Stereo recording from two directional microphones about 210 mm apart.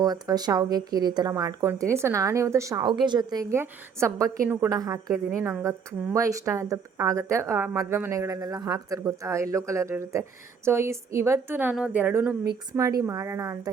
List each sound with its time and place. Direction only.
0.0 s speech: 20° right (ahead or behind)